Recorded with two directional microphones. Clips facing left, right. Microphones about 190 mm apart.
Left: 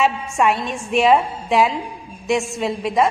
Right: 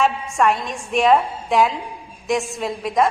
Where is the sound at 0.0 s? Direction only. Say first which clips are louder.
Even; centre (ahead or behind).